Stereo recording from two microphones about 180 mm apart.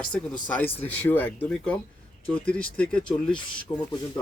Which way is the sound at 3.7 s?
20° left (ahead or behind).